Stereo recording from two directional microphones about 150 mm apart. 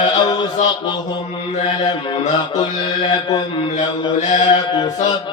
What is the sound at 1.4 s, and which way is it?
Mantra, 45° left (ahead or behind).